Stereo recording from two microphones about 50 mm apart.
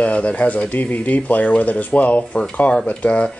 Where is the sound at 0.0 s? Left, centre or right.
Left.